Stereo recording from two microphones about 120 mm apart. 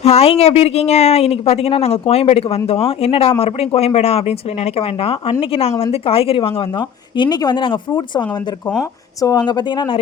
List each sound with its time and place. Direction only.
0.0 s speech: 60° left (ahead or behind); by 10.0 s 40° left (ahead or behind)